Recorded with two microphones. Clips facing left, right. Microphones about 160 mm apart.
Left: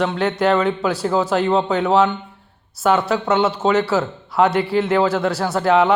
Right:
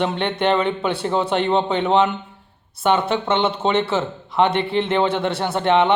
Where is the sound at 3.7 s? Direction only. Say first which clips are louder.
Left 2 dB; 25° right (ahead or behind).